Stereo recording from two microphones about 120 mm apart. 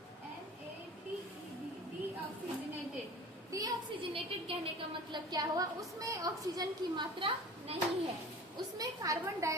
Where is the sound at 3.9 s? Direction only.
50° right (ahead or behind).